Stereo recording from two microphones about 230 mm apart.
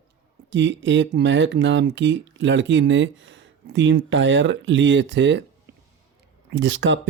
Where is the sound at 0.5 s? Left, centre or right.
Right.